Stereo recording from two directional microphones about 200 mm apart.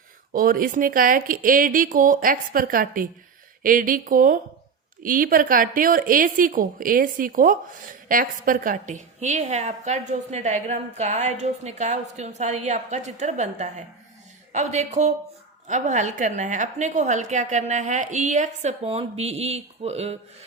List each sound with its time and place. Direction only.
0.3 s a woman's voice: 45° right (ahead or behind)